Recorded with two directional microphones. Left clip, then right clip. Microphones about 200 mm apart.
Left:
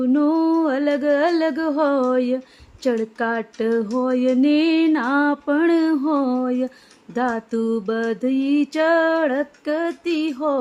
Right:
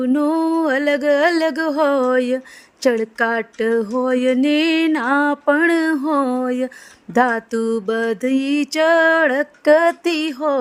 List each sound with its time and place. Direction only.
0.0 s mantra: 45° right (ahead or behind)